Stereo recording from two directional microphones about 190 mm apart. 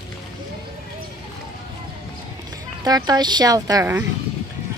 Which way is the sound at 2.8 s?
20° right (ahead or behind).